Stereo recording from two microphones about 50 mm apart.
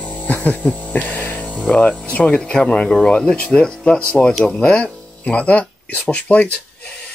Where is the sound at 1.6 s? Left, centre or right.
Left.